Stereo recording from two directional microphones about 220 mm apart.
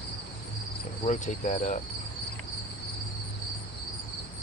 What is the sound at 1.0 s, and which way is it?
Cricket, 35° left (ahead or behind).